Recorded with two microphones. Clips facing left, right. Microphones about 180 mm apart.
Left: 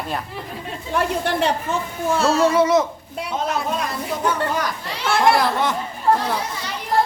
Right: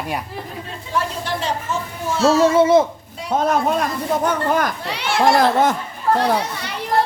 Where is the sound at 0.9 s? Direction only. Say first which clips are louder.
Left 2 dB; 60° left (ahead or behind).